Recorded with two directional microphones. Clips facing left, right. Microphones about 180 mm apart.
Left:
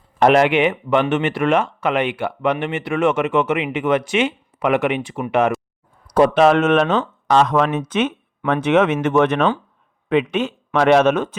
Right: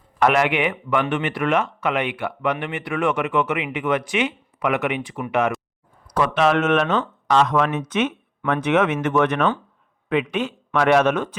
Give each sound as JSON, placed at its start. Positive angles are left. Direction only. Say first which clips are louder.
{"t": 0.2, "sound": "speech", "louder": "left 5 dB", "side_deg": 30}